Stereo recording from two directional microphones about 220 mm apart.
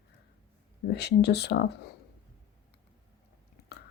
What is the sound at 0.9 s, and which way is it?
Speech, 50° left (ahead or behind).